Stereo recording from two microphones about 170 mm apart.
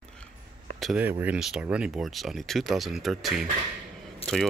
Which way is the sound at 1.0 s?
10° right (ahead or behind).